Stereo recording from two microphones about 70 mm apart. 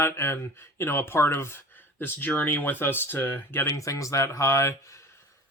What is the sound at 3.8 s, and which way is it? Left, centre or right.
Speech, left.